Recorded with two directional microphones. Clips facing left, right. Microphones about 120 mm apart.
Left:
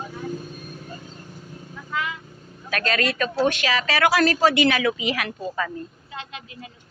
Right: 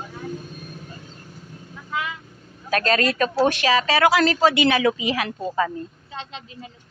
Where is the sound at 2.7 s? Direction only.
35° right (ahead or behind).